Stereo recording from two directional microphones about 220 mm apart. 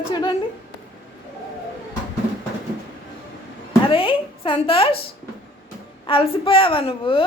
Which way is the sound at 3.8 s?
25° left (ahead or behind).